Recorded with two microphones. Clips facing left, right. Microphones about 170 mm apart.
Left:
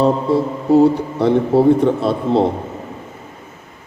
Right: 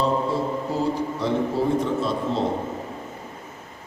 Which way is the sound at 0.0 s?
65° left (ahead or behind).